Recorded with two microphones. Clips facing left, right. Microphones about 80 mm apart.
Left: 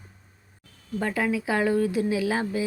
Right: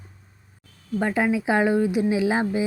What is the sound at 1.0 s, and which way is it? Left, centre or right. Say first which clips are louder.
Speech: right 4 dB; right.